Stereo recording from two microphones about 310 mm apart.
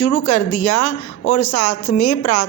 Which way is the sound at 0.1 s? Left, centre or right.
Left.